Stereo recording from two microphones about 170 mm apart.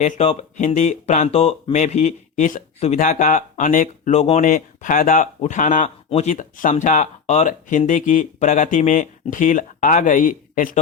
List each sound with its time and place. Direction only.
0.0 s speech: 40° left (ahead or behind)